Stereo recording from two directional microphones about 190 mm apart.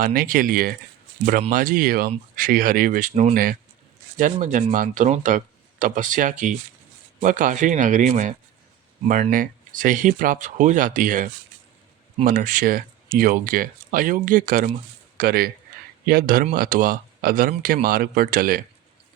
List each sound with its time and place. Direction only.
0.0 s speech: 50° right (ahead or behind)